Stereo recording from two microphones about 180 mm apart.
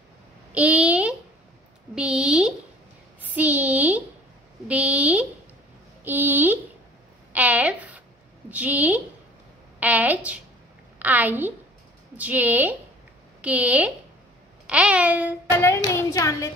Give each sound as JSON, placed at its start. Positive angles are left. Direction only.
{"t": 0.6, "sound": "a woman's voice", "side_deg": -5}
{"t": 15.5, "sound": "hands", "side_deg": 15}